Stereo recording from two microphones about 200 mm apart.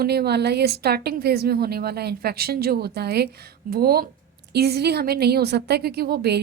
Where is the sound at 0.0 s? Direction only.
50° right (ahead or behind).